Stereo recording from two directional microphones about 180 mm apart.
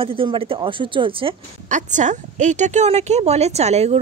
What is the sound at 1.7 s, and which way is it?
A woman's voice, 45° right (ahead or behind).